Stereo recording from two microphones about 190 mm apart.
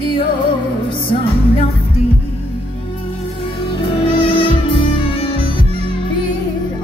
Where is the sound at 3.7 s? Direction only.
30° left (ahead or behind).